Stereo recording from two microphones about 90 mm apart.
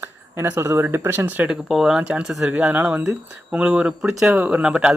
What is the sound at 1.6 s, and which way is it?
Speech, centre (ahead or behind).